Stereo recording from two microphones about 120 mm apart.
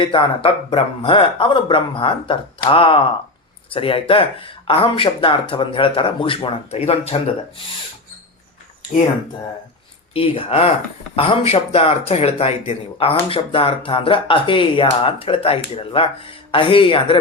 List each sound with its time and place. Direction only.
0.0 s speech: 45° left (ahead or behind)
10.2 s speech: 50° left (ahead or behind)